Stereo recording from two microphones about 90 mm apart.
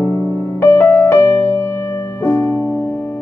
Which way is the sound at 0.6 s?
30° left (ahead or behind).